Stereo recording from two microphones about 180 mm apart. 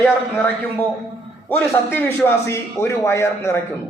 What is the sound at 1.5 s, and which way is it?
A man's voice, 10° left (ahead or behind).